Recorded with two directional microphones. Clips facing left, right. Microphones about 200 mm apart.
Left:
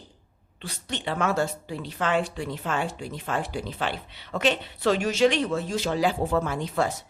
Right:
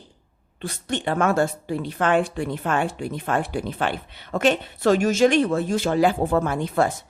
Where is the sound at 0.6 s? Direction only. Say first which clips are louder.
Right 6 dB; 50° right (ahead or behind).